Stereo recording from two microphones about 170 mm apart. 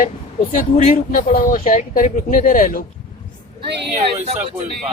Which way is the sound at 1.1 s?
60° left (ahead or behind).